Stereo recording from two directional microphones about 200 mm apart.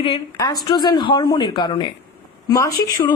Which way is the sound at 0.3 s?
20° left (ahead or behind).